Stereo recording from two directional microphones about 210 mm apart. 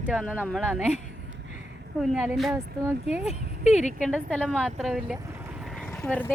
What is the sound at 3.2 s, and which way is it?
Speech, 30° left (ahead or behind).